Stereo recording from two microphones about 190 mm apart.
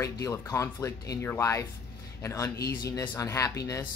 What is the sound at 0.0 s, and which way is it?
Speech, 15° left (ahead or behind).